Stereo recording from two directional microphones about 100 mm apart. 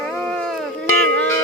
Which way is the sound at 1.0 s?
15° left (ahead or behind).